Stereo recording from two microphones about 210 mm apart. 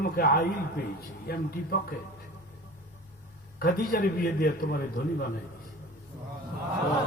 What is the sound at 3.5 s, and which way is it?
A man's voice, 45° left (ahead or behind).